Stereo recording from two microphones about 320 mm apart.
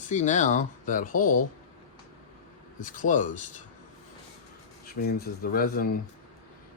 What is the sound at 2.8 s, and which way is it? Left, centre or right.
Speech, left.